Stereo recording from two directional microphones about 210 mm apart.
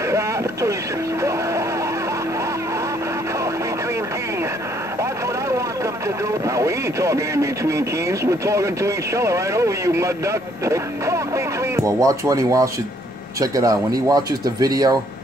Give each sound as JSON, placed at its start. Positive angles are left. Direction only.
{"t": 0.1, "sound": "vehicle", "side_deg": -15}
{"t": 6.4, "sound": "speech", "side_deg": -15}